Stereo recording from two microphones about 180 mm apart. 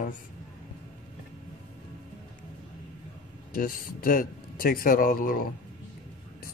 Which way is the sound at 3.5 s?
55° left (ahead or behind).